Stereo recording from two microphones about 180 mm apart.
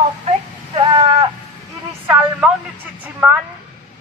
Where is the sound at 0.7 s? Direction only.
25° right (ahead or behind).